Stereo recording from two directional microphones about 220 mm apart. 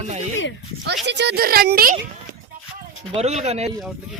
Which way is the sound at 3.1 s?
30° right (ahead or behind).